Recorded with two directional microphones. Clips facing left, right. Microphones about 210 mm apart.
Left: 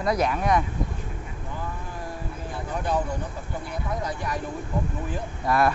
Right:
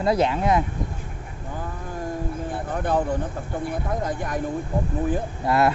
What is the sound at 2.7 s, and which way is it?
Speech, 55° right (ahead or behind).